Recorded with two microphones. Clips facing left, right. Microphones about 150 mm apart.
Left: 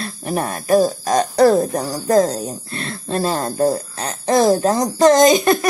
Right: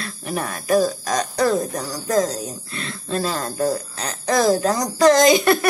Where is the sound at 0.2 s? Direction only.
40° left (ahead or behind).